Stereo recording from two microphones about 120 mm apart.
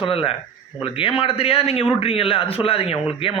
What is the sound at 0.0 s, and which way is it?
Speech, 50° left (ahead or behind).